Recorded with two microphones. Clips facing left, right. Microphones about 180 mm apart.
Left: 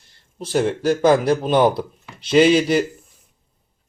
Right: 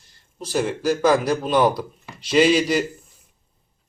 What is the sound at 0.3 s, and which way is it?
Speech, 25° left (ahead or behind).